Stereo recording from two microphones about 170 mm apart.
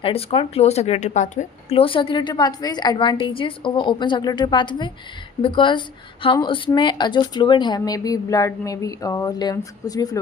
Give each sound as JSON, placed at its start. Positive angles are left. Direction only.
{"t": 0.0, "sound": "speech", "side_deg": 35}
{"t": 1.7, "sound": "speech", "side_deg": 30}